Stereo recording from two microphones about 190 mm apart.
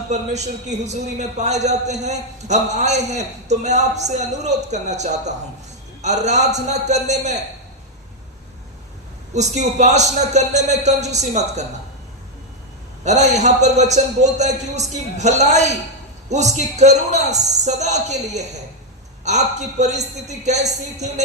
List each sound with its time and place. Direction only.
0.1 s a man's voice: 35° right (ahead or behind)
9.3 s a man's voice: 35° right (ahead or behind)
13.1 s a man's voice: 35° right (ahead or behind)